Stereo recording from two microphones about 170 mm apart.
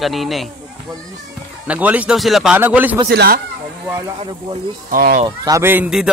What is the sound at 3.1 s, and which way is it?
Speech, 70° right (ahead or behind).